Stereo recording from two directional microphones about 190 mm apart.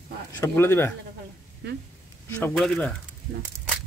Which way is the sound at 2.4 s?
5° left (ahead or behind).